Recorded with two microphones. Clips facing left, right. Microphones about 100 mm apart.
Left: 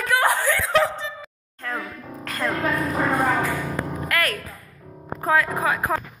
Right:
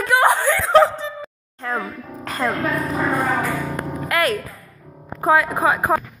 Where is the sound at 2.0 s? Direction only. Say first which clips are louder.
Right 2 dB; 10° right (ahead or behind).